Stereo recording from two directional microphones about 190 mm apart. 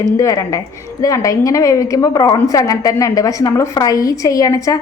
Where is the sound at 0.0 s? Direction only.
15° left (ahead or behind).